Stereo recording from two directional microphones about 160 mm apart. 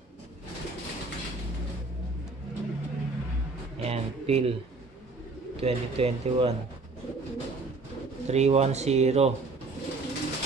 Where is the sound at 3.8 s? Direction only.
40° right (ahead or behind).